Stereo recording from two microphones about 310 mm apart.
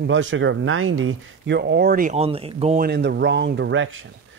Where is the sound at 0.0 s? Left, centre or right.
Right.